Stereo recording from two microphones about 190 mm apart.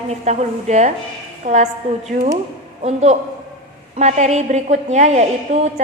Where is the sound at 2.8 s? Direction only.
35° right (ahead or behind).